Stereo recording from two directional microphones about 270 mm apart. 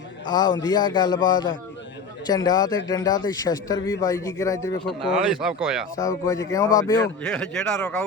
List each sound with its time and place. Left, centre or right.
0.3 s a man's voice: centre
5.2 s speech: centre
6.0 s a man's voice: centre